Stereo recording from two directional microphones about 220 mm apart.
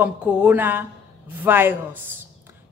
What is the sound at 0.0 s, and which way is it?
Speech, 5° right (ahead or behind).